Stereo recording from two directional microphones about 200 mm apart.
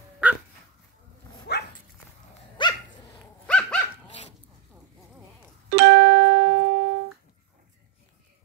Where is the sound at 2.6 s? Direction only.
25° left (ahead or behind).